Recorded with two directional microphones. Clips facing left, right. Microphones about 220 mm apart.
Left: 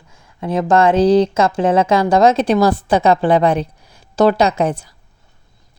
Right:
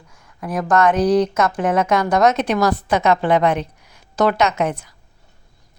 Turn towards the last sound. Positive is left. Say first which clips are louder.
# left 3 dB
turn(degrees=30)  # may be behind; listen again after turning